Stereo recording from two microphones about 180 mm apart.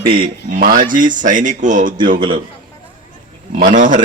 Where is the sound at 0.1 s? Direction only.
50° right (ahead or behind).